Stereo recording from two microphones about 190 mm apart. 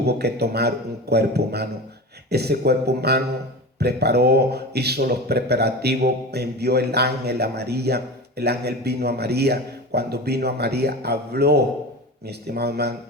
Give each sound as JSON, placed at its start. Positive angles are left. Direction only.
{"t": 0.0, "sound": "speech", "side_deg": -60}